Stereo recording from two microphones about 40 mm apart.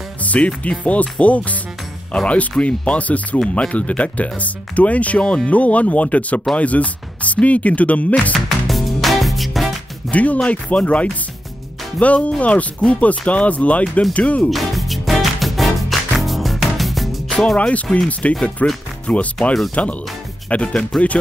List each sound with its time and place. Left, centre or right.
0.2 s music: left
0.7 s speech: left
8.5 s music: centre
10.1 s speech: left
14.5 s music: centre
17.6 s speech: left
20.9 s speech: centre